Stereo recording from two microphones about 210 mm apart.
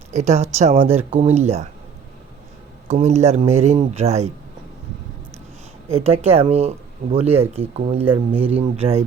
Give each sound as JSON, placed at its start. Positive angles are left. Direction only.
{"t": 0.1, "sound": "speech", "side_deg": -35}
{"t": 2.9, "sound": "speech", "side_deg": -30}
{"t": 5.9, "sound": "speech", "side_deg": -30}